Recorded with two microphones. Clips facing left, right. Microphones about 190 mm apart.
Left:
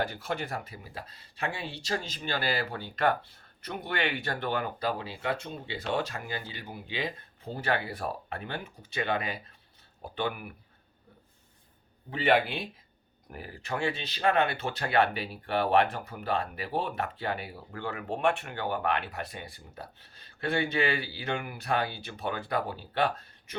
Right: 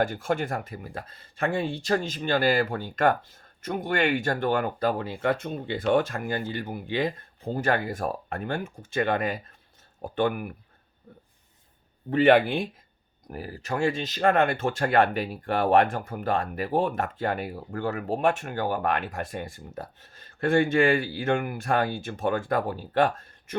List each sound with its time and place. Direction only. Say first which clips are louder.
0.0 s speech: right 7 dB; 50° right (ahead or behind)
12.1 s speech: right 7 dB; 50° right (ahead or behind)
13.2 s speech: right 6 dB; 40° right (ahead or behind)